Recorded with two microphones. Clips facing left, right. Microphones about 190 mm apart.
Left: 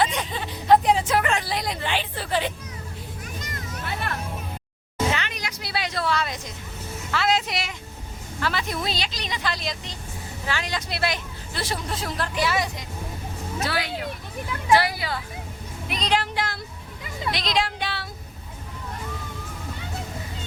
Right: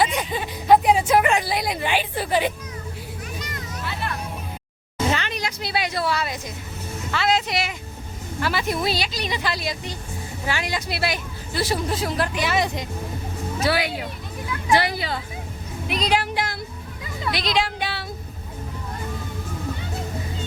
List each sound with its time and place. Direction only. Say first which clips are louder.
0.0 s hubbub: right 2 dB; 10° right (ahead or behind)
3.4 s children playing: right 2 dB; 50° left (ahead or behind)
5.1 s a sound: right 4 dB; 35° right (ahead or behind); by 6.4 s 5° right (ahead or behind)
7.1 s speech: right 1 dB; centre (ahead or behind); by 12.6 s 20° right (ahead or behind)
13.7 s a woman's voice: right 6 dB; 10° right (ahead or behind)
15.9 s speech: right 2 dB; 5° right (ahead or behind)
17.3 s a sound: right 2 dB; 5° right (ahead or behind)